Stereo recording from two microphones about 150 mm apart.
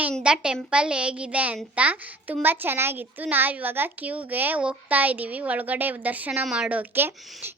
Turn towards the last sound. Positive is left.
turn(degrees=-15)  # may be behind; listen again after turning